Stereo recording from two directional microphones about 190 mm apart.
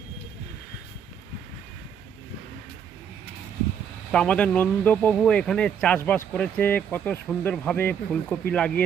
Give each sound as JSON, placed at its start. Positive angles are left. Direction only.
{"t": 4.1, "sound": "speech", "side_deg": 5}